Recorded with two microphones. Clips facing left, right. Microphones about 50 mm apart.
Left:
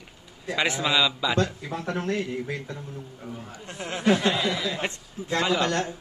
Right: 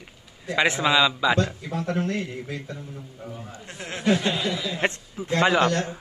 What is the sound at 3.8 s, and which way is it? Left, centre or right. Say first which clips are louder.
Speech: even; centre.